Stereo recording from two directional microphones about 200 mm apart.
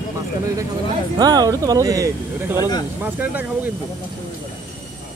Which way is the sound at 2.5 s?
20° left (ahead or behind).